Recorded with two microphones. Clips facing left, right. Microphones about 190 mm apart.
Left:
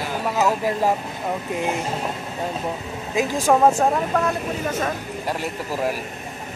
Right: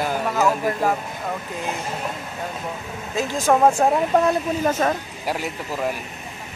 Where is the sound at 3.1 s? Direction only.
10° left (ahead or behind).